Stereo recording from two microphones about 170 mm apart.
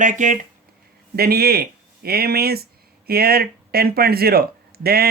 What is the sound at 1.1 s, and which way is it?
Speech, 65° right (ahead or behind).